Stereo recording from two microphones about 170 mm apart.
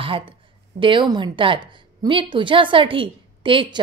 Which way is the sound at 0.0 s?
30° right (ahead or behind).